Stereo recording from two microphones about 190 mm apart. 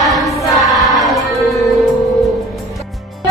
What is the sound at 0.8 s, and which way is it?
Music, centre (ahead or behind).